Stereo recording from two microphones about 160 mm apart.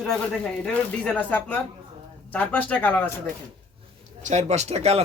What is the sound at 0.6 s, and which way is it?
Speech, 10° left (ahead or behind).